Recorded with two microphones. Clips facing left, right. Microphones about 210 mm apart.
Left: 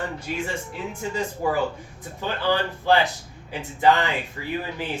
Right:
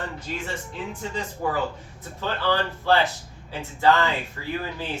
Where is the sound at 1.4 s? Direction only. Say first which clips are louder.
Left 2 dB; 10° left (ahead or behind).